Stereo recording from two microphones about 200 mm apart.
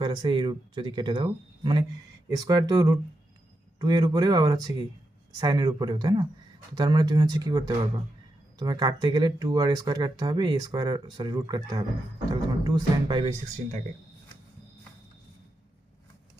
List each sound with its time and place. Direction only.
0.0 s speech: 20° right (ahead or behind)